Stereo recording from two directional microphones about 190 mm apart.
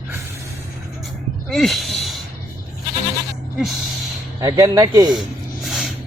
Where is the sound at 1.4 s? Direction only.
Centre (ahead or behind).